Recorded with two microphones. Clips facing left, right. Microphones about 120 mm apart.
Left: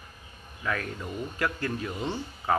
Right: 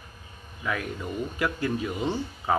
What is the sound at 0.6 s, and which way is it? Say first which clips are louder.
Speech: right 1 dB; 15° right (ahead or behind).